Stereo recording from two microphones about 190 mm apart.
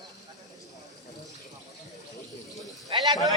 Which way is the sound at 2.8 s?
20° right (ahead or behind).